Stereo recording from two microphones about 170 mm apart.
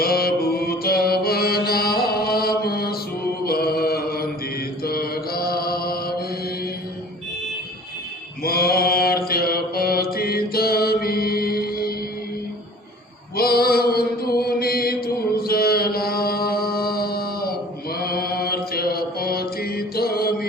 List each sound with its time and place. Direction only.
0.0 s mantra: 65° left (ahead or behind)
8.4 s mantra: 65° left (ahead or behind)
13.3 s chant: 65° left (ahead or behind)
17.9 s mantra: 65° left (ahead or behind)